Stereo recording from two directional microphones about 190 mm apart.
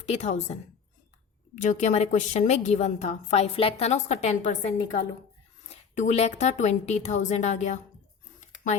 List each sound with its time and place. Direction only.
0.0 s a woman's voice: 35° left (ahead or behind)
1.5 s a woman's voice: 40° left (ahead or behind)